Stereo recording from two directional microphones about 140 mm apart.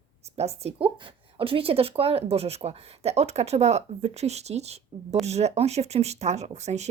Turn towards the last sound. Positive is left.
turn(degrees=-55)  # may be behind; listen again after turning